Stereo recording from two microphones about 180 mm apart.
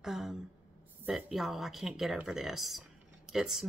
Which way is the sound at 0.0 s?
Centre (ahead or behind).